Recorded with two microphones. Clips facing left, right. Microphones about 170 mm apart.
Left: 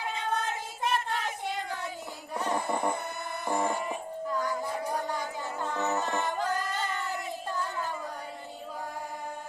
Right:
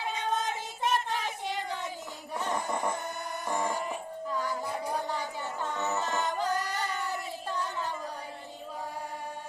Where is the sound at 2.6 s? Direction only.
Centre (ahead or behind).